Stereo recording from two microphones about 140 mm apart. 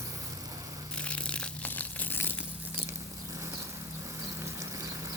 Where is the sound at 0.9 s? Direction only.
10° left (ahead or behind).